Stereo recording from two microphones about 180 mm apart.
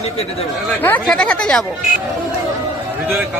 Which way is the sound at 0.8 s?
10° left (ahead or behind).